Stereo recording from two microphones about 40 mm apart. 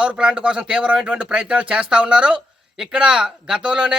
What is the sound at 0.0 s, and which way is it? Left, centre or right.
Speech, right.